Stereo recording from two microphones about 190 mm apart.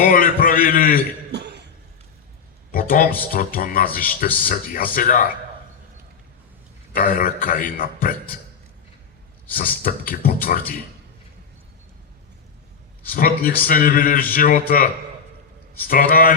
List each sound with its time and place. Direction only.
0.0 s a man's voice: 45° left (ahead or behind)
1.3 s cough: 65° right (ahead or behind)
2.7 s speech: 45° left (ahead or behind)
6.9 s speech: 50° left (ahead or behind)
9.6 s speech: 45° left (ahead or behind)
13.1 s speech: 50° left (ahead or behind)
15.9 s speech: 45° left (ahead or behind)